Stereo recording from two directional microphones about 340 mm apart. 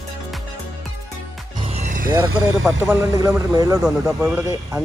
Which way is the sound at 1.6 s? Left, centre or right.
Centre.